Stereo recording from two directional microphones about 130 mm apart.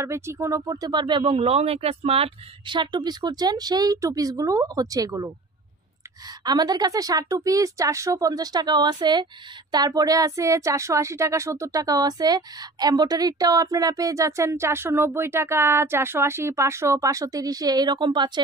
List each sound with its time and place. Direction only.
0.0 s speech: 20° right (ahead or behind)
6.4 s a woman's voice: 30° right (ahead or behind)